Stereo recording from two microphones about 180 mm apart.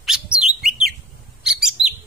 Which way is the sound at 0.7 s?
35° left (ahead or behind).